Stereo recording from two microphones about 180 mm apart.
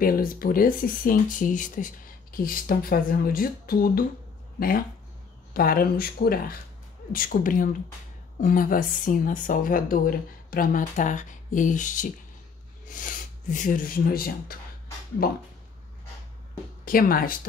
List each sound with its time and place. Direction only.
0.0 s a woman's voice: 55° left (ahead or behind)
16.8 s a woman's voice: 50° left (ahead or behind)